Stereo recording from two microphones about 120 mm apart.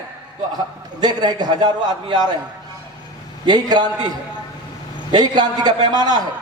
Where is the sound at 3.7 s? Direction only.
35° right (ahead or behind).